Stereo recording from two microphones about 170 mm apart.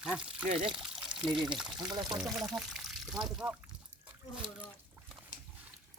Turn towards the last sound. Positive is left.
turn(degrees=-5)  # may be behind; listen again after turning